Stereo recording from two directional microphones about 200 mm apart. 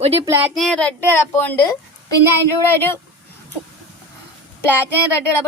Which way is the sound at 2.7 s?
10° left (ahead or behind).